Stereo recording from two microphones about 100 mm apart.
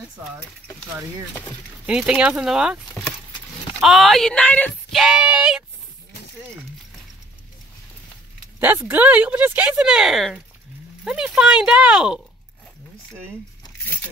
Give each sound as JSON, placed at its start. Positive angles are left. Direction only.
{"t": 1.9, "sound": "speech", "side_deg": -10}
{"t": 3.8, "sound": "speech", "side_deg": 0}
{"t": 4.9, "sound": "speech", "side_deg": -5}
{"t": 8.5, "sound": "speech", "side_deg": -20}